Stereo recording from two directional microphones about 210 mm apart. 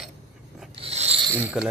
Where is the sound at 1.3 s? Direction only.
5° right (ahead or behind).